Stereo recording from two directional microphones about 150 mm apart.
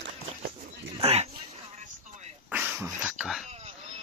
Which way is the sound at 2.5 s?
10° right (ahead or behind).